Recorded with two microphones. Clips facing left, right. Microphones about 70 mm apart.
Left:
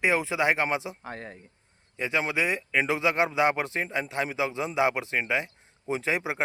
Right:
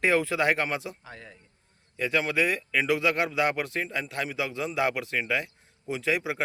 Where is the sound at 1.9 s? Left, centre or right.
Left.